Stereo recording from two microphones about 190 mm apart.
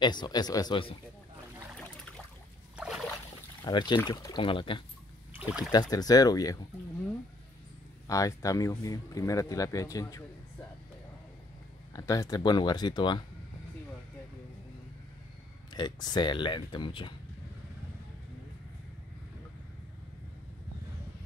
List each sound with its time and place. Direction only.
0.0 s speech: 25° left (ahead or behind)
2.7 s a sound: 5° right (ahead or behind)
3.6 s speech: 25° left (ahead or behind)
8.1 s speech: 15° left (ahead or behind)
11.9 s speech: 20° left (ahead or behind)
15.7 s speech: 20° left (ahead or behind)